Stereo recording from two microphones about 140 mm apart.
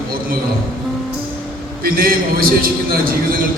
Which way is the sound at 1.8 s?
90° right.